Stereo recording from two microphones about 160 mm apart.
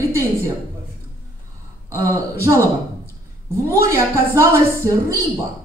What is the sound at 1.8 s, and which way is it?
Speech, 20° right (ahead or behind).